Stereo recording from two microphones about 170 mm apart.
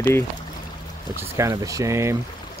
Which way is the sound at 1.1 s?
20° right (ahead or behind).